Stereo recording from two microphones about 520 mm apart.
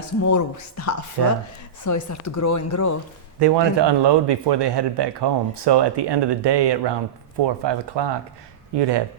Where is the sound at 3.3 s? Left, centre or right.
Right.